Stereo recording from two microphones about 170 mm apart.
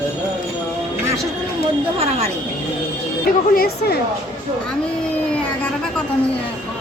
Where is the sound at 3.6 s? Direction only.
65° left (ahead or behind).